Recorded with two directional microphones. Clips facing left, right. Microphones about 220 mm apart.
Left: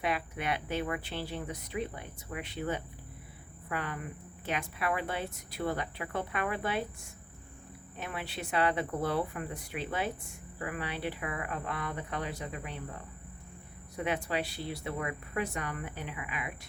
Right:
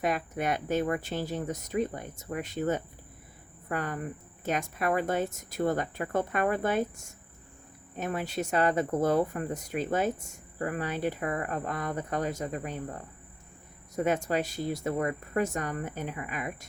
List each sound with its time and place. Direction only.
0.0 s speech: 45° right (ahead or behind)